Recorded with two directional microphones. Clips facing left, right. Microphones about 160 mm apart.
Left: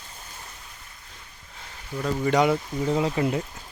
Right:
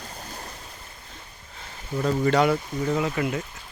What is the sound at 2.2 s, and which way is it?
Speech, 15° left (ahead or behind).